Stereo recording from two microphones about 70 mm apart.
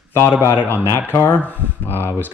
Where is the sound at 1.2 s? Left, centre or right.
Left.